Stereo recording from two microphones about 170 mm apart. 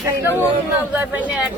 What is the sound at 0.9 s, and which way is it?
Speech, 10° right (ahead or behind).